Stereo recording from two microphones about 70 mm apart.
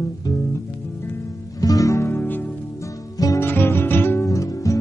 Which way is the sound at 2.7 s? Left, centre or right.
Left.